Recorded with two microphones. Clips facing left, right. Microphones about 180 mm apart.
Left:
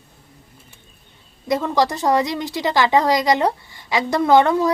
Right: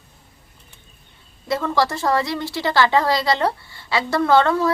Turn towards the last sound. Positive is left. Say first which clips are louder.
# left 2 dB
turn(degrees=15)  # may be behind; listen again after turning